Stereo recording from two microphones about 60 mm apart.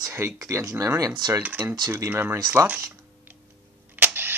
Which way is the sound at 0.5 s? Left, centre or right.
Right.